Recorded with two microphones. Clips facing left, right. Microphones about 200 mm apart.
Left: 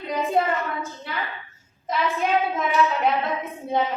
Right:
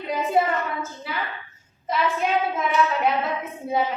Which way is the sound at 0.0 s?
Centre (ahead or behind).